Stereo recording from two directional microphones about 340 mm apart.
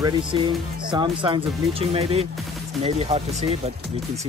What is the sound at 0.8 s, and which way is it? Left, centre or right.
Speech, centre.